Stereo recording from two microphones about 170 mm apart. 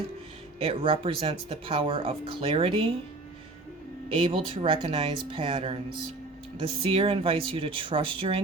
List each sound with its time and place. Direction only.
0.6 s speech: 35° right (ahead or behind)
4.2 s speech: 30° right (ahead or behind)